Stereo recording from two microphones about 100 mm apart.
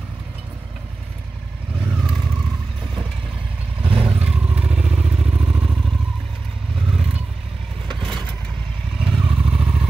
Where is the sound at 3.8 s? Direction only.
65° right (ahead or behind).